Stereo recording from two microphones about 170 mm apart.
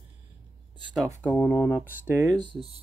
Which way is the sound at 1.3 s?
5° left (ahead or behind).